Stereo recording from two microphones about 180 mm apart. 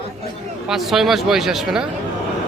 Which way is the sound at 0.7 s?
Centre (ahead or behind).